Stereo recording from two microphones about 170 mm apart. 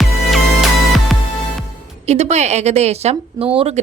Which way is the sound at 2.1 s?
40° right (ahead or behind).